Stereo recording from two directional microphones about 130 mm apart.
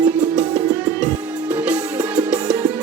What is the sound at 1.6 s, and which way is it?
Music, 10° right (ahead or behind).